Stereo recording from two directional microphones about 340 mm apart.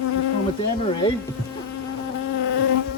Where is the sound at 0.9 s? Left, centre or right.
Centre.